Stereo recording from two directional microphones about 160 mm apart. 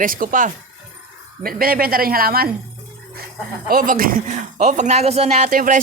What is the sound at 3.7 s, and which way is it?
Speech, 60° right (ahead or behind).